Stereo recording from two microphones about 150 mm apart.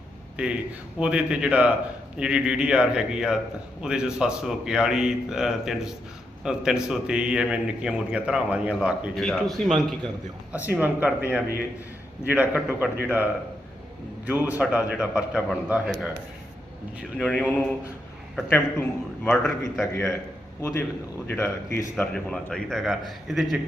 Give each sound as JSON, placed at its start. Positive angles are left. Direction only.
{"t": 0.4, "sound": "a man's voice", "side_deg": -5}
{"t": 10.5, "sound": "a man's voice", "side_deg": -10}
{"t": 14.3, "sound": "a man's voice", "side_deg": -10}
{"t": 17.2, "sound": "a man's voice", "side_deg": 10}
{"t": 20.6, "sound": "a man's voice", "side_deg": 20}